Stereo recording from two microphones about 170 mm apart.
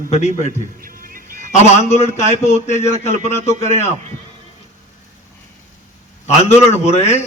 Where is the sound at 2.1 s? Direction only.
40° left (ahead or behind).